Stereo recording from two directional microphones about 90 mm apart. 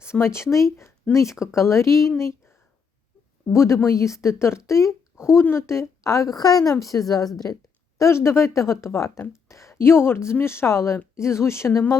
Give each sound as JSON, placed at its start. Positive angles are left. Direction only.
{"t": 0.0, "sound": "speech", "side_deg": 30}
{"t": 3.5, "sound": "speech", "side_deg": 30}
{"t": 7.9, "sound": "speech", "side_deg": 30}